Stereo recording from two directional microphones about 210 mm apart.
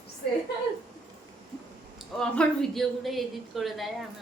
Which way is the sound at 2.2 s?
5° left (ahead or behind).